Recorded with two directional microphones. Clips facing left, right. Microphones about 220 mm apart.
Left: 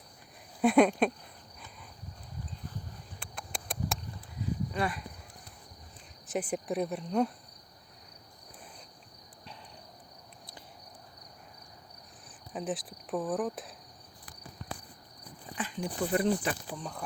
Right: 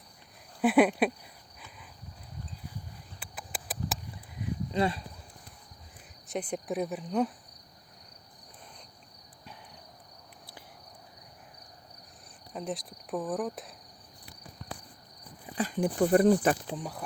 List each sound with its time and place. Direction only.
0.6 s speech: 5° right (ahead or behind)
3.2 s a sound: 5° right (ahead or behind)
4.4 s a sound: 25° right (ahead or behind)
6.2 s speech: 5° left (ahead or behind)
12.5 s speech: centre (ahead or behind)
15.5 s speech: 45° right (ahead or behind)
16.6 s speech: 20° right (ahead or behind)